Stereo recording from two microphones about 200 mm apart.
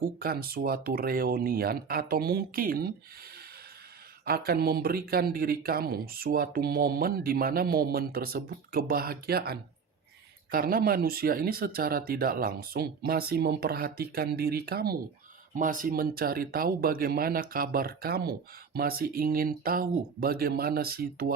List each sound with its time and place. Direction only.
0.0 s speech: 50° right (ahead or behind)
4.3 s speech: 50° right (ahead or behind)